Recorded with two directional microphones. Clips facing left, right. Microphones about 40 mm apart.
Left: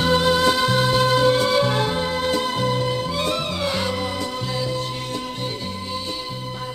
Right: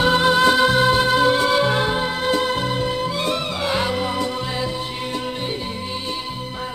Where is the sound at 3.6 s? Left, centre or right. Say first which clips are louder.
Right 2 dB; right.